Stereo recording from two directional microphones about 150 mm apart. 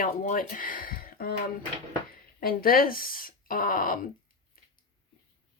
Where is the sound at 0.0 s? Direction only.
65° left (ahead or behind).